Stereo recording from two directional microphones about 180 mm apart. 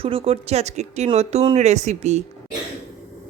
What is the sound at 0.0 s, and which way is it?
Speech, 30° right (ahead or behind).